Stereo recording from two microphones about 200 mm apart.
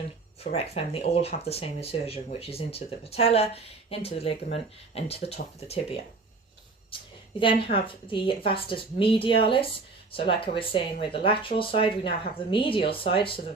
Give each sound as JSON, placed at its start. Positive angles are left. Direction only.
{"t": 0.4, "sound": "speech", "side_deg": 30}
{"t": 7.3, "sound": "speech", "side_deg": 25}